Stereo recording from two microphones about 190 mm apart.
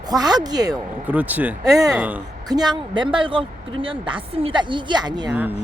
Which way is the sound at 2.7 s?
25° right (ahead or behind).